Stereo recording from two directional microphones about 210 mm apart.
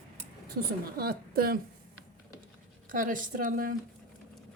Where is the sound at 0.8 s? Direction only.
45° right (ahead or behind).